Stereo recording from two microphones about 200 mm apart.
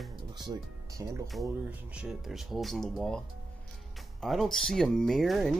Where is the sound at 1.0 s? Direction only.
15° right (ahead or behind); by 3.2 s centre (ahead or behind).